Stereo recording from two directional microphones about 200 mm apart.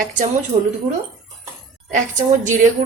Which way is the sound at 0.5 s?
30° right (ahead or behind).